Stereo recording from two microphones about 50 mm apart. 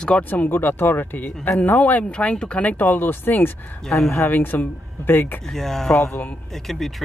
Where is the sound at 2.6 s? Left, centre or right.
Left.